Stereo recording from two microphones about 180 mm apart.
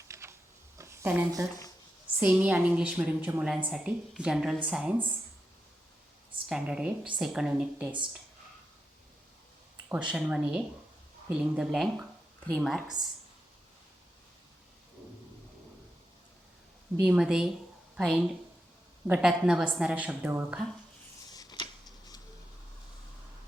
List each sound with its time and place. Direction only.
0.1 s a sound: 15° right (ahead or behind)
2.2 s a woman's voice: 10° right (ahead or behind)
6.5 s a woman's voice: 5° right (ahead or behind)
9.9 s a woman's voice: 5° right (ahead or behind)
17.0 s a woman's voice: 5° right (ahead or behind)
21.3 s tick-tock: 25° left (ahead or behind)